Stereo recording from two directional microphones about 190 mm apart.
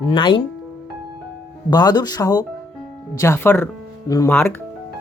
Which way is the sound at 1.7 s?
20° left (ahead or behind).